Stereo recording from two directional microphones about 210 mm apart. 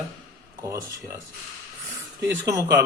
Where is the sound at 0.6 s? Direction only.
15° right (ahead or behind).